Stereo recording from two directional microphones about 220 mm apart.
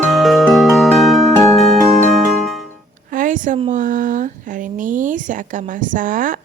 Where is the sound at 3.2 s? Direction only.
35° right (ahead or behind).